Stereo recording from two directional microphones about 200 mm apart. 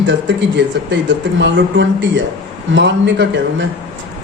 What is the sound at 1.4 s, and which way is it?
Speech, 65° right (ahead or behind).